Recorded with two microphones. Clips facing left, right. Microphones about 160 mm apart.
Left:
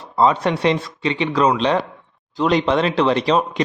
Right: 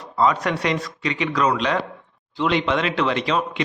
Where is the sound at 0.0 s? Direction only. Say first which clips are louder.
Left 3 dB; 30° left (ahead or behind).